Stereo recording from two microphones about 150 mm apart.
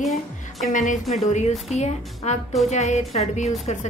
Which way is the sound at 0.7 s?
55° left (ahead or behind).